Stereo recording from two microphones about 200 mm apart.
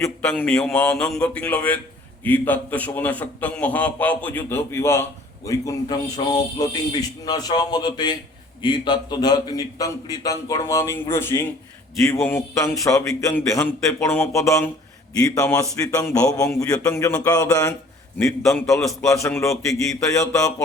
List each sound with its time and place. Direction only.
0.0 s a man's voice: 5° left (ahead or behind)
19.0 s a man's voice: 15° left (ahead or behind)